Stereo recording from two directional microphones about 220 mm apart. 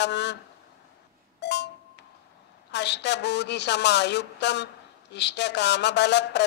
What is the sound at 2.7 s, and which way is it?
A woman's voice, 50° left (ahead or behind).